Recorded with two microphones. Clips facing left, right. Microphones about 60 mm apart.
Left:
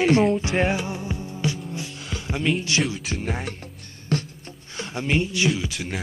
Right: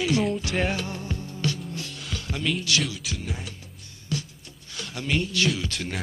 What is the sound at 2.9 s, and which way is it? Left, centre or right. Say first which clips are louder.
Music: left 5 dB; left.